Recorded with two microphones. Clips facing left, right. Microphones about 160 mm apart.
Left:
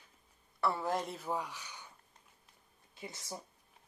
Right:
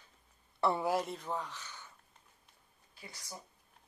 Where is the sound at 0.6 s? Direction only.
20° right (ahead or behind).